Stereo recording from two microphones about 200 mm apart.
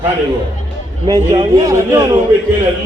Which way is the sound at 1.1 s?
20° right (ahead or behind).